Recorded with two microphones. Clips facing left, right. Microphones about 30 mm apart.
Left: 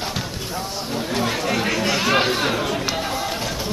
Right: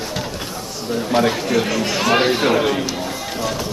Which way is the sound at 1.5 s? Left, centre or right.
Centre.